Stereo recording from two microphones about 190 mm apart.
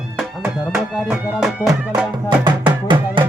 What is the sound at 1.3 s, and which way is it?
Music, 5° right (ahead or behind).